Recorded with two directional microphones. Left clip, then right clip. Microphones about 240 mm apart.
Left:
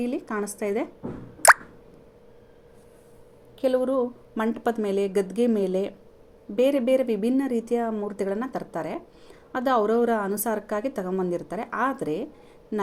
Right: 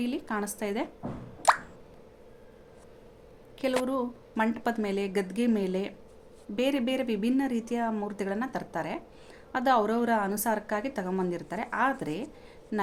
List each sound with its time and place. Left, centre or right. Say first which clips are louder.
0.0 s a woman's voice: left 3 dB; centre
1.4 s plop: left 8 dB; left
3.6 s a woman's voice: left 6 dB; centre
12.7 s a sound: left 2 dB; centre